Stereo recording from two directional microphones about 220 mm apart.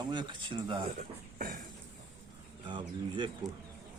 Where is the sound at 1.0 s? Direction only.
40° right (ahead or behind).